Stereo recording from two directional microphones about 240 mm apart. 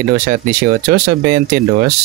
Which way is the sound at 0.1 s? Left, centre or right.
Right.